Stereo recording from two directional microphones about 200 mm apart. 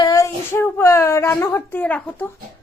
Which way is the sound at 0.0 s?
15° left (ahead or behind).